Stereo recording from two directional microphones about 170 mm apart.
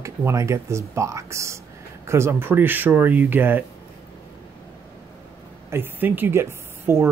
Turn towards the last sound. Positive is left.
turn(degrees=-15)  # may be behind; listen again after turning